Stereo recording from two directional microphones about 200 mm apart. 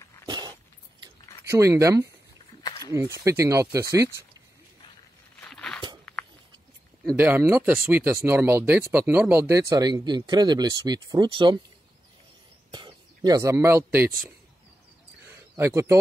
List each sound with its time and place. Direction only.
0.3 s dog: 20° right (ahead or behind)
1.5 s speech: 15° right (ahead or behind)
2.6 s a sound: 20° left (ahead or behind)
3.3 s speech: 15° right (ahead or behind)
5.4 s walk: 5° left (ahead or behind)
6.1 s a sound: 5° left (ahead or behind)
7.2 s speech: 10° right (ahead or behind)
12.7 s speech: 20° right (ahead or behind)
15.2 s a sound: 15° right (ahead or behind)